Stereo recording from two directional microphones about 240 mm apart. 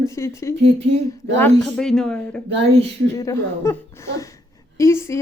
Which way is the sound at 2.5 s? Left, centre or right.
Right.